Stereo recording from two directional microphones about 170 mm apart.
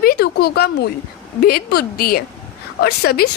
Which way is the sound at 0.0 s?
65° left (ahead or behind).